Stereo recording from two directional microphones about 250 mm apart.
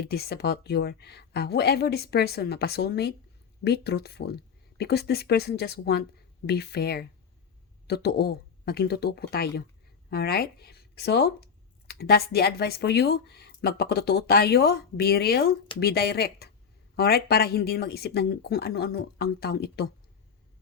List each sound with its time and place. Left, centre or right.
0.0 s speech: left